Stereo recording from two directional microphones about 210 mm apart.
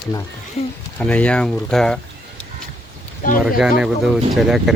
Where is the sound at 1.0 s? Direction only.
5° left (ahead or behind).